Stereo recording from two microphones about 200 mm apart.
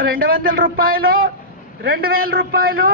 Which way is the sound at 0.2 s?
45° right (ahead or behind).